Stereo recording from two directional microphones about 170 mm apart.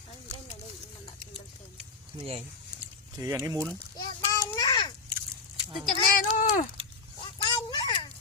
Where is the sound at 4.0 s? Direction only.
20° left (ahead or behind).